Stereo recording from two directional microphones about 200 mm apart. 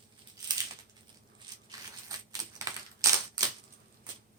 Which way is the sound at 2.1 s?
15° right (ahead or behind).